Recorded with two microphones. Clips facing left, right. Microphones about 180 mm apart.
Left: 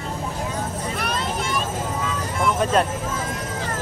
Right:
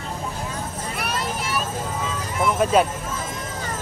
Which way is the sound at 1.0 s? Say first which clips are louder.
Even; 5° right (ahead or behind).